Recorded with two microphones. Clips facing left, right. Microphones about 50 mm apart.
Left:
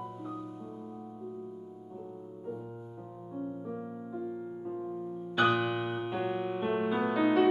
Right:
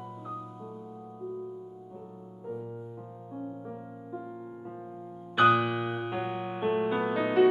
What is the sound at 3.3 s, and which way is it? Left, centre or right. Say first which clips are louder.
Music: left 2 dB; centre.